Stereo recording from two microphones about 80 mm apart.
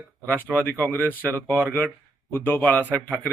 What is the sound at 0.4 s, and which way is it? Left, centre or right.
A man's voice, centre.